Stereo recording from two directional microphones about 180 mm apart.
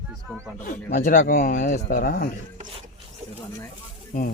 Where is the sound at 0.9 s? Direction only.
50° left (ahead or behind).